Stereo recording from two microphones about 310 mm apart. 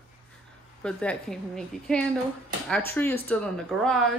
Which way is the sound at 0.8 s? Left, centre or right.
Centre.